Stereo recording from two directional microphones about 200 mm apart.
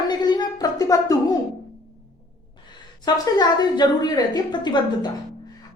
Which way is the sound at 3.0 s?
20° left (ahead or behind).